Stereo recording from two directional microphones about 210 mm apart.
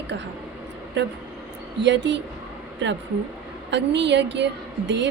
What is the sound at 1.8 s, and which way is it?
A woman's voice, 55° right (ahead or behind).